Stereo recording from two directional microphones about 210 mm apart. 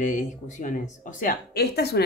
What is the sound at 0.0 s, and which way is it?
Speech, 35° left (ahead or behind).